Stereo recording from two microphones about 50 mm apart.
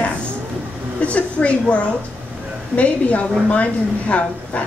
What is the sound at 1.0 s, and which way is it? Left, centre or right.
A woman's voice, left.